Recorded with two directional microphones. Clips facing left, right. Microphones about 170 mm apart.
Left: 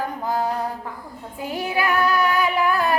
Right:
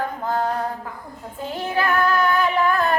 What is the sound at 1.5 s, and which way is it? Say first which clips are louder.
Female singing: even; 10° left (ahead or behind).